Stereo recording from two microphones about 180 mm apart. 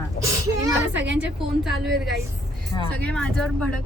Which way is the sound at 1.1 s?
5° right (ahead or behind).